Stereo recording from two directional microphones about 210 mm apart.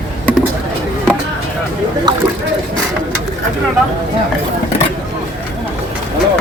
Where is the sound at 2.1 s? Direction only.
20° right (ahead or behind).